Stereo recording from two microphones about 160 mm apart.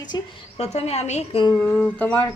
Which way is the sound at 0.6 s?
40° left (ahead or behind).